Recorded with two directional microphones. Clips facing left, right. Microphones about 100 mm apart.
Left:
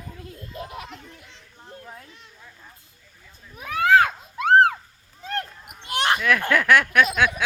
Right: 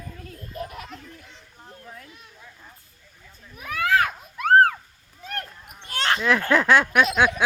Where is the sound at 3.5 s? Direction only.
30° left (ahead or behind).